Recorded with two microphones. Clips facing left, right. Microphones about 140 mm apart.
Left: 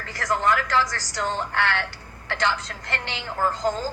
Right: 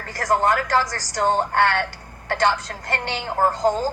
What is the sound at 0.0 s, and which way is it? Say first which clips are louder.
A woman's voice: right 4 dB; 40° right (ahead or behind).